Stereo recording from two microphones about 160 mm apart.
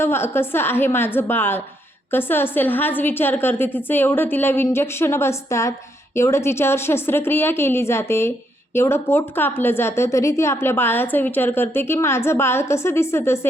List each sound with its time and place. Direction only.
0.0 s a woman's voice: 15° left (ahead or behind)